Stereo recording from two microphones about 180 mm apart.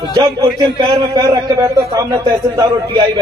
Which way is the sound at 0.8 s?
20° right (ahead or behind).